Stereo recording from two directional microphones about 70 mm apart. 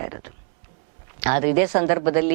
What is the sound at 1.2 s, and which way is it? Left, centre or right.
Speech, centre.